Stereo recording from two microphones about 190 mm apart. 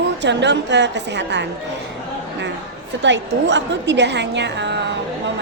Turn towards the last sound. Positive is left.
turn(degrees=-65)  # may be behind; listen again after turning